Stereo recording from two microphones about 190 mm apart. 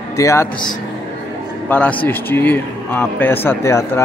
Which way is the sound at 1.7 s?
10° left (ahead or behind).